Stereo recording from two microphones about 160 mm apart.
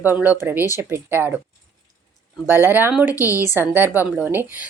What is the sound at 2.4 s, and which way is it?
Speech, 10° right (ahead or behind).